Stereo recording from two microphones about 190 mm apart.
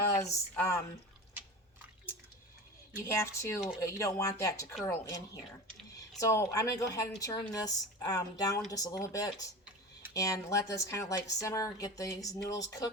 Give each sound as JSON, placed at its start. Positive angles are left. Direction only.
{"t": 0.1, "sound": "a woman's voice", "side_deg": 15}
{"t": 3.0, "sound": "a woman's voice", "side_deg": 15}